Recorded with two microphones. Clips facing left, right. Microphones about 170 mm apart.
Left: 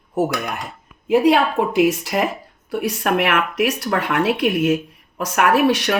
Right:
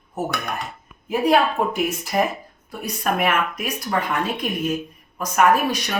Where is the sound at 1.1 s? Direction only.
80° left.